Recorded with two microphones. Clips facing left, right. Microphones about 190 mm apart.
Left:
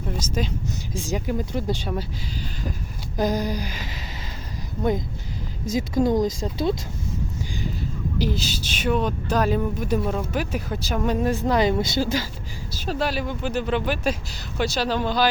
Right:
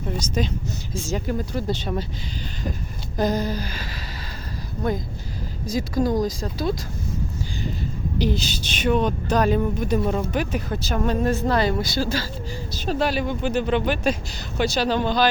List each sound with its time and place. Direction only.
0.1 s a woman's voice: 5° left (ahead or behind)
3.2 s speech: 10° left (ahead or behind)
8.2 s a woman's voice: 5° left (ahead or behind)
12.7 s a woman's voice: 5° left (ahead or behind)